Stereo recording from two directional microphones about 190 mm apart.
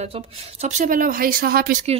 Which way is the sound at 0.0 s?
30° right (ahead or behind).